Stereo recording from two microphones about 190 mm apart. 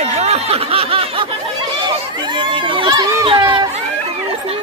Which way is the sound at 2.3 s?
25° right (ahead or behind).